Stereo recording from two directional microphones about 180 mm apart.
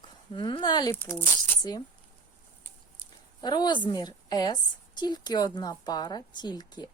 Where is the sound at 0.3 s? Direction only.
25° left (ahead or behind).